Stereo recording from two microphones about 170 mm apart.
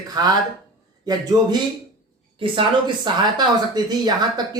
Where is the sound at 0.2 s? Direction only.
25° right (ahead or behind).